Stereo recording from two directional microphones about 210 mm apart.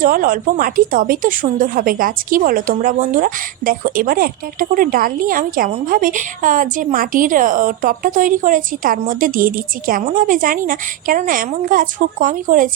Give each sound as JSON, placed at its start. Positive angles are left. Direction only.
{"t": 0.0, "sound": "speech", "side_deg": -40}